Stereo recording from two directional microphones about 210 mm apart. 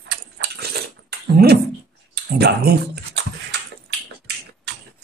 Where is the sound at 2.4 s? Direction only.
50° right (ahead or behind).